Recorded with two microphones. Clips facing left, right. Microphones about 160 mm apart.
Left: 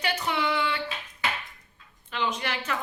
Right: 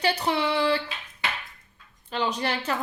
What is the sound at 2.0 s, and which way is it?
Speech, 35° right (ahead or behind).